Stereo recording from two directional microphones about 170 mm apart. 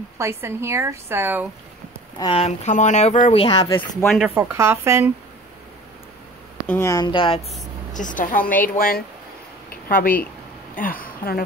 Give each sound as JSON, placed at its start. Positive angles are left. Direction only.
{"t": 0.2, "sound": "a woman's voice", "side_deg": -15}
{"t": 2.1, "sound": "speech", "side_deg": 30}
{"t": 3.4, "sound": "speech", "side_deg": 25}
{"t": 4.4, "sound": "a woman's voice", "side_deg": -15}
{"t": 6.7, "sound": "speech", "side_deg": 15}
{"t": 7.9, "sound": "speech", "side_deg": 50}